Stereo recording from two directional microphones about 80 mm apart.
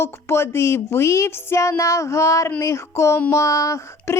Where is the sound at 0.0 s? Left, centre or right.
Left.